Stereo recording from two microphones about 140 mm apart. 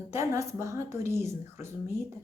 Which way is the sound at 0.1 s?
20° right (ahead or behind).